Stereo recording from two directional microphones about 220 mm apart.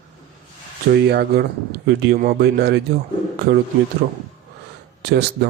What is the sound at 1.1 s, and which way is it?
Speech, 50° right (ahead or behind).